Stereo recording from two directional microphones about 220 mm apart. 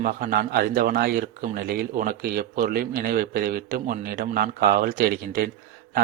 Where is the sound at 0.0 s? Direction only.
40° right (ahead or behind).